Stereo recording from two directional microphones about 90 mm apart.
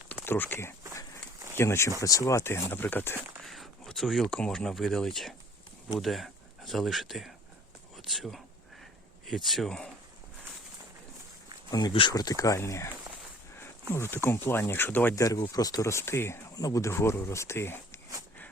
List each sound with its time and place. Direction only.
0.3 s speech: 25° left (ahead or behind)
3.4 s speech: centre (ahead or behind)
11.7 s speech: 45° left (ahead or behind)
13.9 s speech: 30° left (ahead or behind)
15.1 s speech: 40° left (ahead or behind)
16.6 s speech: 40° left (ahead or behind)